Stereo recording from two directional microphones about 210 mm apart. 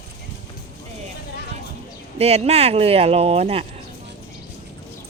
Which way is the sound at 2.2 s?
30° right (ahead or behind).